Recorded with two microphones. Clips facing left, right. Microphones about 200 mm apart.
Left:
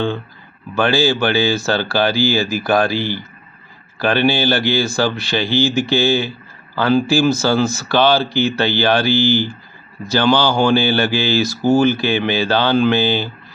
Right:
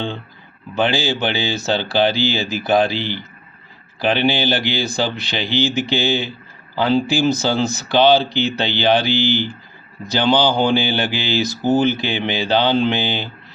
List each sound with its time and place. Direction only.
0.8 s speech: 20° right (ahead or behind)